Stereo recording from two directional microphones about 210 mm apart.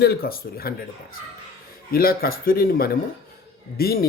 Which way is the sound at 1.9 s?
45° left (ahead or behind).